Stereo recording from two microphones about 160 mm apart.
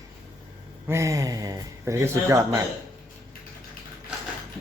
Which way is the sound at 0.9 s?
20° right (ahead or behind).